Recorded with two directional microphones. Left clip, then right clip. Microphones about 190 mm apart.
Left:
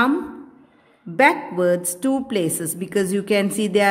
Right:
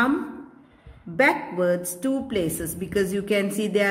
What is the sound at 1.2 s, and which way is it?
A woman's voice, 40° left (ahead or behind).